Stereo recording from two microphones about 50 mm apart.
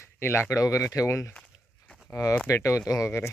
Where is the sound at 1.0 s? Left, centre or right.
Left.